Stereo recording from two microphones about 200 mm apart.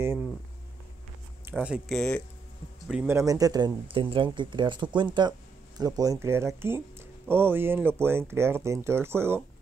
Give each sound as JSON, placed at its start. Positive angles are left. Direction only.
{"t": 1.6, "sound": "speech", "side_deg": 0}
{"t": 2.9, "sound": "speech", "side_deg": -10}